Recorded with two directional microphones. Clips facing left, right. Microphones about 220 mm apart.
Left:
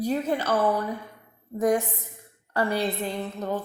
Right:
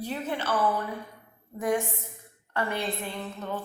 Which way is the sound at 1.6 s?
40° left (ahead or behind).